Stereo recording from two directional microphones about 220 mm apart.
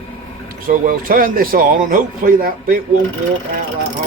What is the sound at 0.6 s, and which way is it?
A man's voice, 40° right (ahead or behind).